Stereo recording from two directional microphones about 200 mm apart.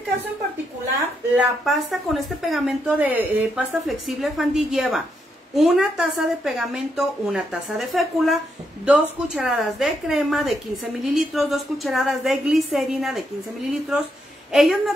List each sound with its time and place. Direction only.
1.3 s speech: centre (ahead or behind)